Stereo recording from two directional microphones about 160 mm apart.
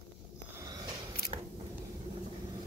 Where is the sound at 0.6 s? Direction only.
25° right (ahead or behind).